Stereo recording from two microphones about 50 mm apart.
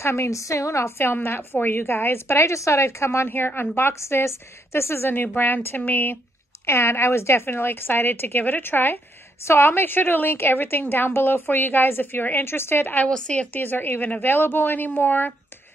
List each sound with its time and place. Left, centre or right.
0.0 s a woman's voice: left
0.9 s a woman's voice: left
3.3 s a woman's voice: left
4.0 s a woman's voice: left
5.1 s speech: left
6.6 s a woman's voice: left
7.4 s a woman's voice: left
13.1 s a woman's voice: centre
13.5 s speech: left